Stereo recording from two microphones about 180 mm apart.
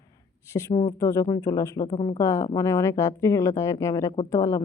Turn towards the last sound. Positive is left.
turn(degrees=20)  # may be behind; listen again after turning